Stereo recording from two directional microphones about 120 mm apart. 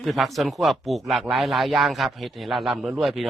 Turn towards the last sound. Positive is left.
turn(degrees=0)  # may be behind; listen again after turning